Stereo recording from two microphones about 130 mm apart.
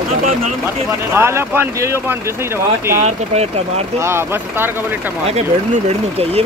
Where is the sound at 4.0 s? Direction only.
20° right (ahead or behind).